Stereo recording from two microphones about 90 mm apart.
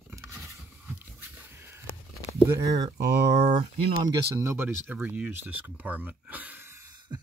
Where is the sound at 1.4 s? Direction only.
25° right (ahead or behind).